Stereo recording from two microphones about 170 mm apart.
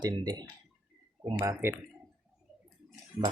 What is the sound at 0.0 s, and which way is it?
Speech, 25° right (ahead or behind).